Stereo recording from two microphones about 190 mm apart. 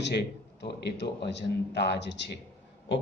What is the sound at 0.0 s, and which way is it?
Speech, 65° left (ahead or behind).